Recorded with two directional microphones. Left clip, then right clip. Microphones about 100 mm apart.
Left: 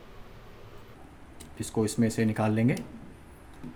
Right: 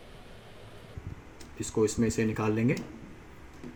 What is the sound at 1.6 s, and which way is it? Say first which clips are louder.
Speech: right 1 dB; 75° left (ahead or behind).